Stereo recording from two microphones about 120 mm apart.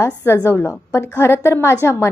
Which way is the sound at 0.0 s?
20° left (ahead or behind).